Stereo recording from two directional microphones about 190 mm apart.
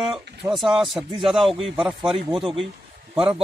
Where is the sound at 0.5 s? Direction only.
Centre (ahead or behind).